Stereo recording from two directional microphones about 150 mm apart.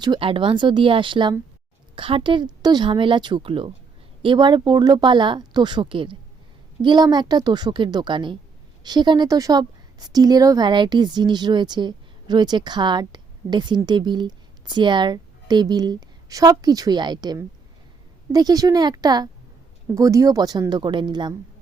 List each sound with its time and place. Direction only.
0.0 s a woman's voice: 35° right (ahead or behind)